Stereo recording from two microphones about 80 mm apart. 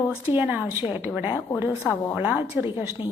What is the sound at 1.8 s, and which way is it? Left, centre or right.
Speech, centre.